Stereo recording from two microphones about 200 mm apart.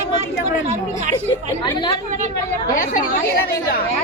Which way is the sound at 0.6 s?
35° right (ahead or behind).